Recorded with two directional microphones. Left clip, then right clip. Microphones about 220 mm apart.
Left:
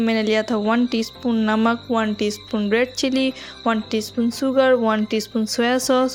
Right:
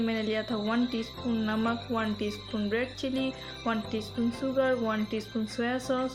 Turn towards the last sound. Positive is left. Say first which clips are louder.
# left 12 dB
turn(degrees=45)  # may be behind; listen again after turning